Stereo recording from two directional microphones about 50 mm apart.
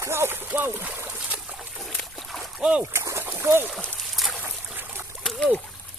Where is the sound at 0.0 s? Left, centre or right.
Right.